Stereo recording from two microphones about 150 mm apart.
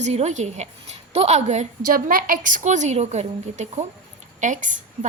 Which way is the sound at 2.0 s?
70° right (ahead or behind).